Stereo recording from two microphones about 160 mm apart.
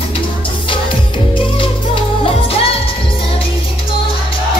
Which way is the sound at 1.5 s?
35° left (ahead or behind).